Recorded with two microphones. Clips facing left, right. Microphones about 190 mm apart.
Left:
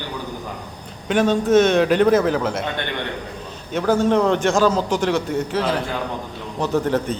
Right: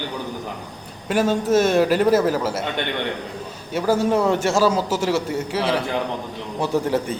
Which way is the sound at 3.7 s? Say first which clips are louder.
Left 1 dB; 5° right (ahead or behind).